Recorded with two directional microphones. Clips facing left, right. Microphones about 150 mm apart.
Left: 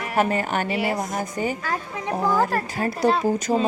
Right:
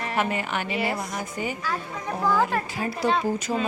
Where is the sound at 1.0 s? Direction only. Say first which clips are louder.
Left 5 dB; 45° left (ahead or behind).